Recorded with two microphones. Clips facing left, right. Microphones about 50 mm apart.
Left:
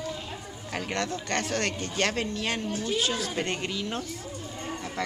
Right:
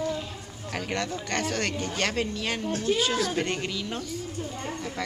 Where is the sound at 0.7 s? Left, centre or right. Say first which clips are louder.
Even; centre.